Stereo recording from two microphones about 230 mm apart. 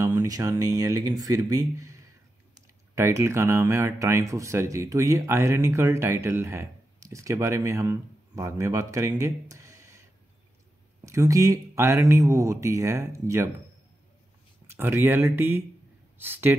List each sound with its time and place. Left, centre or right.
0.0 s speech: centre
11.1 s speech: centre
14.7 s speech: centre